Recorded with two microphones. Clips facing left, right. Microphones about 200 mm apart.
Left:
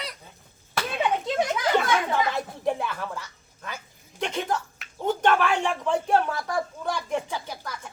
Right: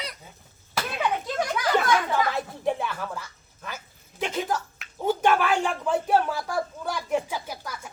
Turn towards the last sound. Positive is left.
turn(degrees=-10)  # may be behind; listen again after turning